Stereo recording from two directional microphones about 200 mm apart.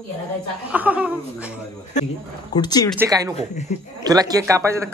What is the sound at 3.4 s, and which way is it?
Speech, 35° left (ahead or behind).